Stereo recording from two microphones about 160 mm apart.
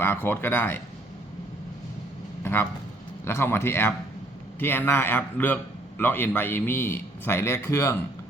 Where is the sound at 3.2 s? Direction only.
15° left (ahead or behind).